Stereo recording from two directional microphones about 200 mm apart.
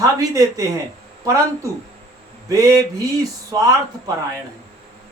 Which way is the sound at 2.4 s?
15° right (ahead or behind).